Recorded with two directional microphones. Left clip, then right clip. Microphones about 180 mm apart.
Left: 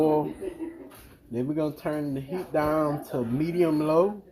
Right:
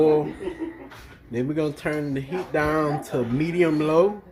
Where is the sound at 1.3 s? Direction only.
10° left (ahead or behind).